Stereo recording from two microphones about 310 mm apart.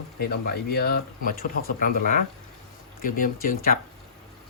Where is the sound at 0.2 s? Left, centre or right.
Left.